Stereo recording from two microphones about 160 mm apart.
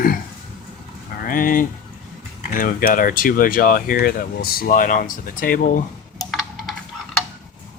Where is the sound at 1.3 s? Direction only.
60° left (ahead or behind).